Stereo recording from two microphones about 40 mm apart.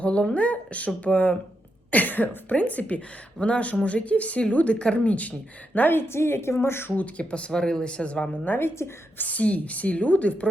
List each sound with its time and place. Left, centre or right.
0.0 s speech: left
1.9 s cough: left
2.6 s speech: left
5.9 s a woman's voice: left
6.9 s speech: left
7.5 s speech: centre
7.9 s speech: left
8.4 s a woman's voice: left
9.1 s speech: left